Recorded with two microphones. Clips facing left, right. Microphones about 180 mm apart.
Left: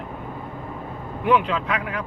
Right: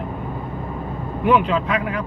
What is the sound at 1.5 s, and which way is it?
Speech, 25° right (ahead or behind).